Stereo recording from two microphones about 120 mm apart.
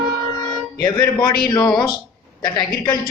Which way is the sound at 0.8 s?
35° left (ahead or behind).